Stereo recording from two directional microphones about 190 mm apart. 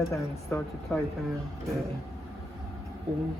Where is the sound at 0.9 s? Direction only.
5° left (ahead or behind).